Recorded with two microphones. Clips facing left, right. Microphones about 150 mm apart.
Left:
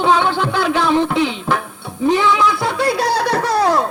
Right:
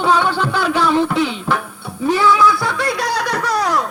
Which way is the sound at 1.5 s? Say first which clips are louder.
Left 1 dB; 20° left (ahead or behind).